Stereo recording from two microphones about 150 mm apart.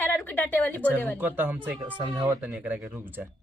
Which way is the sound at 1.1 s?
10° right (ahead or behind).